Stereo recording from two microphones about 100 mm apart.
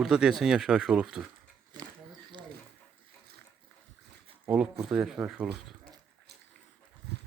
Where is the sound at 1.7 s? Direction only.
45° right (ahead or behind).